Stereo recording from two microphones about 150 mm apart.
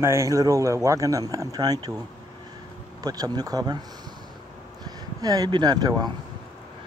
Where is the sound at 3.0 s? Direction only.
25° right (ahead or behind).